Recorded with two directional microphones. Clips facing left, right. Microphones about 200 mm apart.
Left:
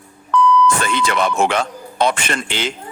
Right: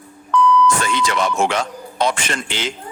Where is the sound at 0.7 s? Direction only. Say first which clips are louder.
Left 1 dB; 60° left (ahead or behind).